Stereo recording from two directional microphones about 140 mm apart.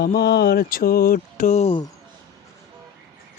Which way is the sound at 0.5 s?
90° left.